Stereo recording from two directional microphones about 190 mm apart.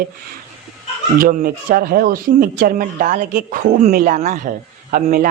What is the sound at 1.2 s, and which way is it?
Speech, 45° right (ahead or behind).